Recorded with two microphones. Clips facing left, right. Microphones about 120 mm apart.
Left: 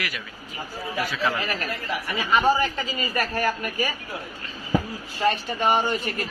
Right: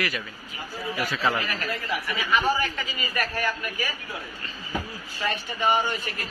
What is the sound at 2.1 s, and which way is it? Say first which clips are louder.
A woman's voice: left 4 dB; 35° left (ahead or behind).